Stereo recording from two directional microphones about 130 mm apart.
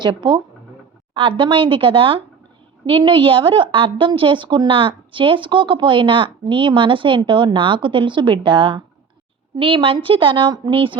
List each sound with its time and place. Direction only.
0.0 s a woman's voice: 35° right (ahead or behind)